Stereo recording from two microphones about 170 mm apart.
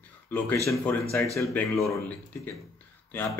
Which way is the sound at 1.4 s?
10° left (ahead or behind).